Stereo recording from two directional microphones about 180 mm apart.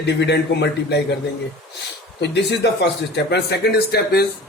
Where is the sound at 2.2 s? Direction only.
70° left (ahead or behind).